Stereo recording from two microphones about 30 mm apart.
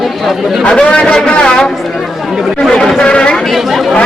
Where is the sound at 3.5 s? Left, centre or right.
Centre.